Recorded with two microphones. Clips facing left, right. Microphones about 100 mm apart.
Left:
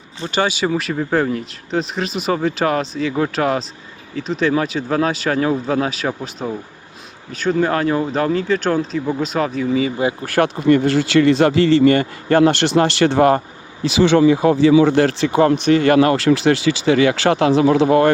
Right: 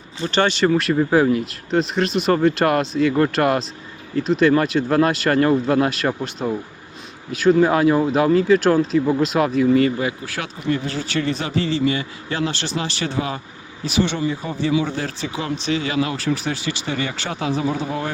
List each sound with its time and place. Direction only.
0.3 s speech: 5° left (ahead or behind)
10.2 s speech: 55° left (ahead or behind)
13.8 s speech: 90° left; by 15.4 s 70° left (ahead or behind)
15.4 s speech: 55° left (ahead or behind)